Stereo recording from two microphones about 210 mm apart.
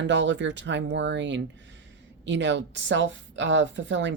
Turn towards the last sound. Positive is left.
turn(degrees=-60)  # may be behind; listen again after turning